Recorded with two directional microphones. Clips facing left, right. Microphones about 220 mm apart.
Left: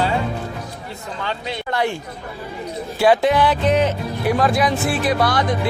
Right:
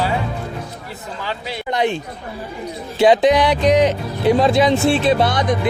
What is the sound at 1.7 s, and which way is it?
Speech, 20° right (ahead or behind).